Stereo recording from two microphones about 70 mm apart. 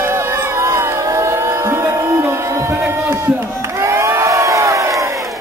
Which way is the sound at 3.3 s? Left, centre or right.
Right.